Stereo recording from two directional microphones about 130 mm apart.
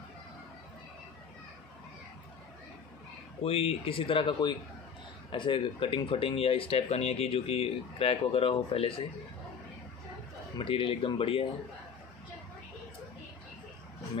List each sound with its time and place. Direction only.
3.4 s speech: 50° left (ahead or behind)
10.6 s speech: 40° left (ahead or behind)